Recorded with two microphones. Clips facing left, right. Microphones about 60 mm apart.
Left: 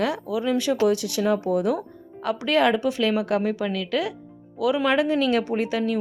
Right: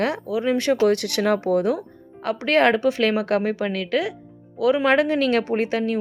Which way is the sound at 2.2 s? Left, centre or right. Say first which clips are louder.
Right 2 dB; right.